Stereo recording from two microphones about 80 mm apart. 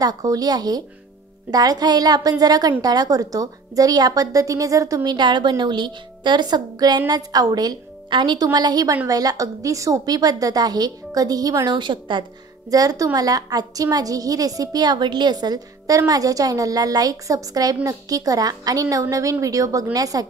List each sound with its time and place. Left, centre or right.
0.0 s a woman's voice: right
5.1 s a woman's voice: right
7.1 s a woman's voice: right
8.1 s a woman's voice: right
11.7 s a woman's voice: right
12.6 s a woman's voice: right